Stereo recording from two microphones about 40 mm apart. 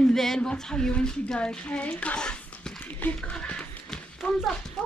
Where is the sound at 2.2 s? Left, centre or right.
Left.